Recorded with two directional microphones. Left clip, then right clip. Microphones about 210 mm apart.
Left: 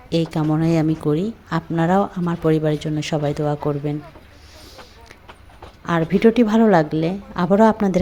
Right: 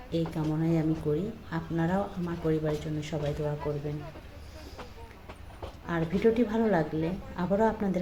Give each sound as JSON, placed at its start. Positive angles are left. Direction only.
{"t": 0.1, "sound": "speech", "side_deg": 50}
{"t": 5.8, "sound": "speech", "side_deg": 50}